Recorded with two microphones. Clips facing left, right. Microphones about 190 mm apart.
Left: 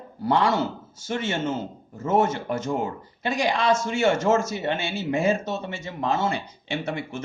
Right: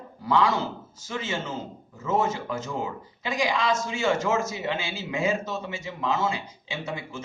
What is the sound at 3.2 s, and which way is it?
A man's voice, 65° left (ahead or behind).